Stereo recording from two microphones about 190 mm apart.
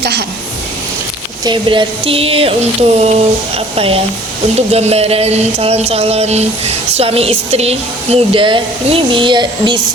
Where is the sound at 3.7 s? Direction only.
30° right (ahead or behind).